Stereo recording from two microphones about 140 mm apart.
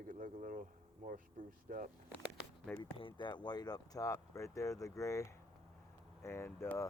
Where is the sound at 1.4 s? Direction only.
75° right (ahead or behind).